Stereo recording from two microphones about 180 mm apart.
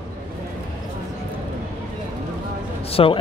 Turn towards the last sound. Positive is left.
turn(degrees=30)  # may be behind; listen again after turning